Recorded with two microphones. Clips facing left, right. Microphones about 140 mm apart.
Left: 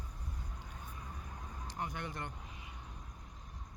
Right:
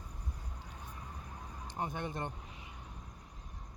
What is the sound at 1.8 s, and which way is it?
Speech, 20° right (ahead or behind).